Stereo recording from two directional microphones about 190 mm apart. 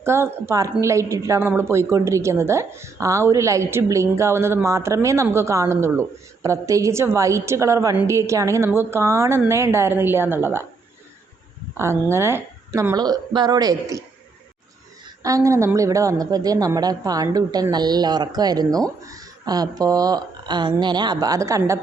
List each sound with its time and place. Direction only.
0.0 s a woman's voice: 15° right (ahead or behind)
11.8 s a woman's voice: 15° right (ahead or behind)
15.2 s a woman's voice: 15° right (ahead or behind)